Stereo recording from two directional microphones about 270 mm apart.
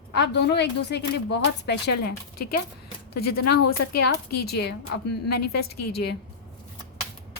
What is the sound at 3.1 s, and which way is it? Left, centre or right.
A woman's voice, left.